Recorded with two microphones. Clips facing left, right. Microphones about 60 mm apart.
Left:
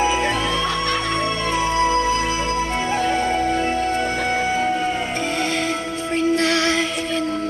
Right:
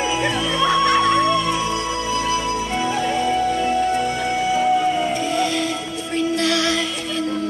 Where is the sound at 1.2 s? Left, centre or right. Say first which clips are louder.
Right 2 dB; left.